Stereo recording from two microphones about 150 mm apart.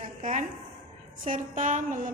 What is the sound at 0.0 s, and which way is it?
Music, 55° right (ahead or behind).